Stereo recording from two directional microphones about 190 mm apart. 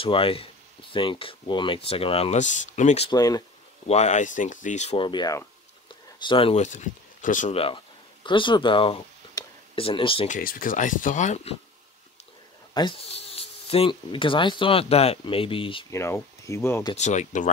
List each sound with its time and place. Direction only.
0.0 s speech: 30° left (ahead or behind)
3.1 s speech: 20° left (ahead or behind)
3.8 s speech: 35° left (ahead or behind)
10.2 s speech: 45° left (ahead or behind)
12.7 s speech: 30° left (ahead or behind)
15.9 s speech: 15° left (ahead or behind)
16.9 s speech: 40° left (ahead or behind)